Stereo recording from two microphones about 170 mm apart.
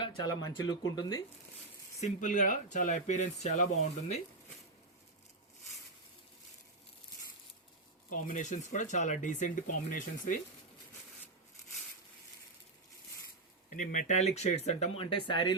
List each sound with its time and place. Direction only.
0.0 s speech: 25° left (ahead or behind)
2.0 s speech: 50° left (ahead or behind)
8.1 s speech: 50° left (ahead or behind)
13.7 s speech: 50° left (ahead or behind); by 15.5 s 25° left (ahead or behind)